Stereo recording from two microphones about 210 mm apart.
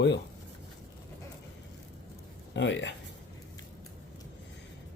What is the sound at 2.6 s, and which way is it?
Speech, 60° left (ahead or behind).